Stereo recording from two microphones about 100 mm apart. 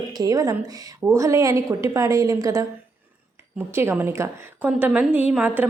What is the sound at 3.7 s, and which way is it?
Speech, 25° right (ahead or behind).